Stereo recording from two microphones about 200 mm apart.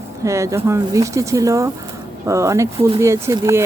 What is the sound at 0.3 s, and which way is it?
Speech, 15° right (ahead or behind).